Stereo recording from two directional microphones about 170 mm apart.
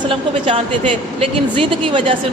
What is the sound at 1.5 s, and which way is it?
Speech, 30° right (ahead or behind).